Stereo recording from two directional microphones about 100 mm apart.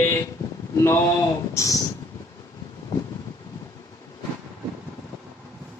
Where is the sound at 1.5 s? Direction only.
30° left (ahead or behind).